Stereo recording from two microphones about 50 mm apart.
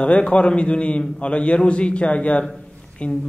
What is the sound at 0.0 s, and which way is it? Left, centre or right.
A man's voice, left.